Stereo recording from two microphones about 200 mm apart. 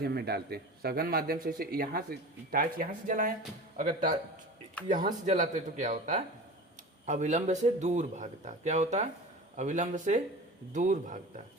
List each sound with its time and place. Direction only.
0.0 s speech: 55° right (ahead or behind)